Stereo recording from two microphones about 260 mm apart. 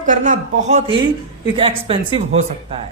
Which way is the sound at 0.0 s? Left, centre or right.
Right.